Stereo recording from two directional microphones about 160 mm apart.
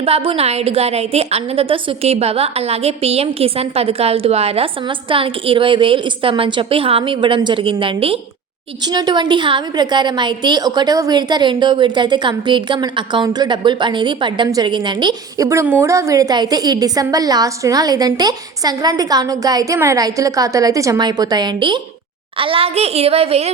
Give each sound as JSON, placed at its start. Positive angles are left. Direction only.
{"t": 0.0, "sound": "a woman's voice", "side_deg": -40}
{"t": 8.8, "sound": "a woman's voice", "side_deg": -25}